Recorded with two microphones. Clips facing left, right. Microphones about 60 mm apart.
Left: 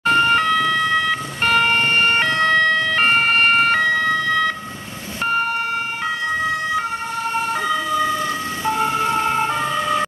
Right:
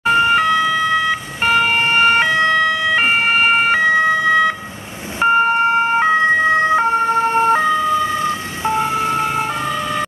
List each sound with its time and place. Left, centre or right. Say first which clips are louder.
0.0 s emergency vehicle: right 2 dB; centre; by 7.6 s right
8.6 s ambulance: right 2 dB; centre